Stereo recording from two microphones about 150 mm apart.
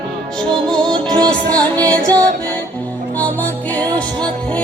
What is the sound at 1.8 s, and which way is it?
Music, 5° left (ahead or behind).